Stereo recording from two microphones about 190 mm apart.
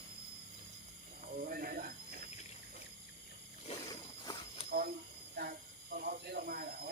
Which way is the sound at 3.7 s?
35° left (ahead or behind).